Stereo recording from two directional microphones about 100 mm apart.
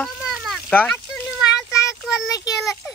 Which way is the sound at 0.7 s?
15° left (ahead or behind).